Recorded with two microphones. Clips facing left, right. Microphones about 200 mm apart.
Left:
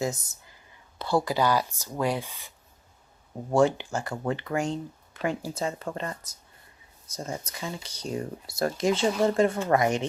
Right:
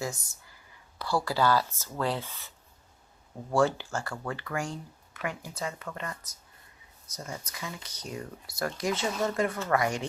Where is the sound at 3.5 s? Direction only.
20° left (ahead or behind).